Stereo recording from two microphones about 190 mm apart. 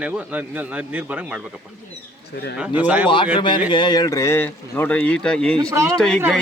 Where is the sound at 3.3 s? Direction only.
25° left (ahead or behind); by 5.5 s 5° left (ahead or behind).